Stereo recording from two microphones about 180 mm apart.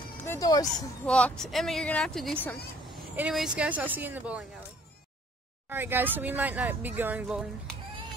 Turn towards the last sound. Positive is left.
turn(degrees=-5)  # may be behind; listen again after turning